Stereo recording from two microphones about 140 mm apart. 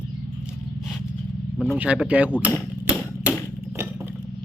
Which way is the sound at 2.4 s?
10° right (ahead or behind).